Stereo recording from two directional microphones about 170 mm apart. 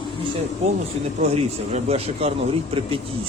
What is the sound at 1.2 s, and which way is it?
Speech, 40° right (ahead or behind).